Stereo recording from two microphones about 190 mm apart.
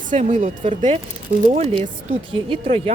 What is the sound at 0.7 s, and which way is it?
Speech, 30° right (ahead or behind).